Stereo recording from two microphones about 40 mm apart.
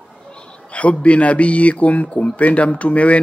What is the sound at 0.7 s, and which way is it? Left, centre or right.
Speech, left.